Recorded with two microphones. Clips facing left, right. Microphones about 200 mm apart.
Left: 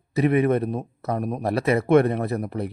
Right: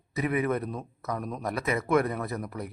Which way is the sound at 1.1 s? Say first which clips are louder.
Left 8 dB; 55° left (ahead or behind).